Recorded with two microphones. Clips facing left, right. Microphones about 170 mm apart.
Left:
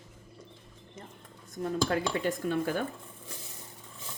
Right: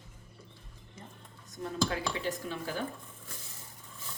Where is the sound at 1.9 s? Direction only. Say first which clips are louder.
Left 5 dB; 50° left (ahead or behind).